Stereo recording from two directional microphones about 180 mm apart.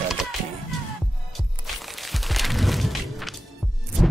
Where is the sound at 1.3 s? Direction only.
Centre (ahead or behind).